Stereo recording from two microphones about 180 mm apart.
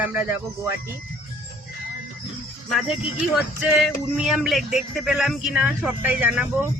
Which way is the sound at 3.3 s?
5° right (ahead or behind).